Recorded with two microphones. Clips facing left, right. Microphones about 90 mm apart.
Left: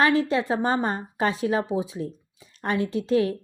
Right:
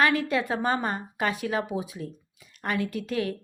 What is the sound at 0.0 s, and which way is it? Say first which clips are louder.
A woman's voice: left 3 dB; 30° left (ahead or behind).